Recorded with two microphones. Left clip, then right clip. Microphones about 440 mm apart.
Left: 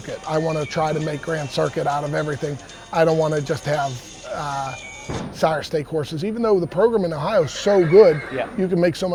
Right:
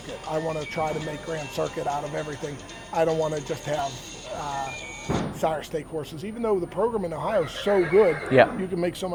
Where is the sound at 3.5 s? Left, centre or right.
Left.